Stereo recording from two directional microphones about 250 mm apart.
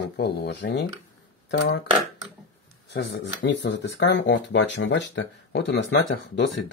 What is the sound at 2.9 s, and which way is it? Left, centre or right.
Speech, left.